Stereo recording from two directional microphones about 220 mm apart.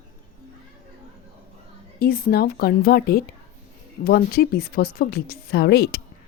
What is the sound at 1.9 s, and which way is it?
Speech, 40° left (ahead or behind).